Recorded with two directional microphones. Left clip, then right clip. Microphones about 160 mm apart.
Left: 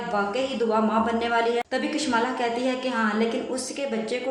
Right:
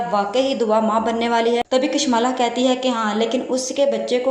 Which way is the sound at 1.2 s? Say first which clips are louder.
Right 5 dB; 30° right (ahead or behind).